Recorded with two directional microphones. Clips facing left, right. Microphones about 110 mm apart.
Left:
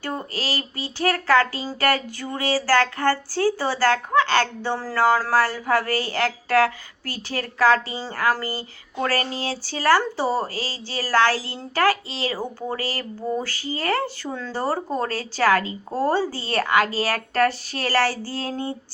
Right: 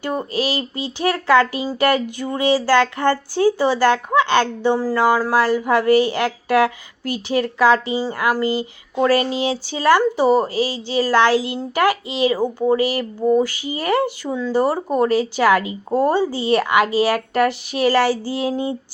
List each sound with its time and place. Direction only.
0.0 s speech: 20° right (ahead or behind)